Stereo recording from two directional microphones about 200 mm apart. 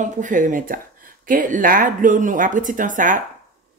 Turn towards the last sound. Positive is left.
turn(degrees=-40)  # may be behind; listen again after turning